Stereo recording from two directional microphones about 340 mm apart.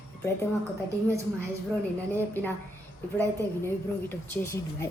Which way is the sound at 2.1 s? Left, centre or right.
Centre.